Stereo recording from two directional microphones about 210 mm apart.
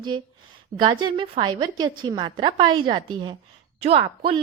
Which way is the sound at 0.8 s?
20° right (ahead or behind).